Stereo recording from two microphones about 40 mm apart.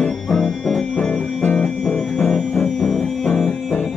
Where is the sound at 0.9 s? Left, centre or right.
Left.